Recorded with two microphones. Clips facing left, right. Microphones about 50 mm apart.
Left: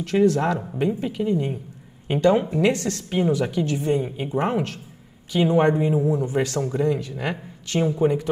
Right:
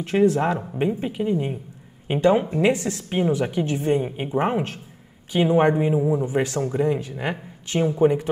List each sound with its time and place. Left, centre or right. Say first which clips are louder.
0.0 s speech: even; right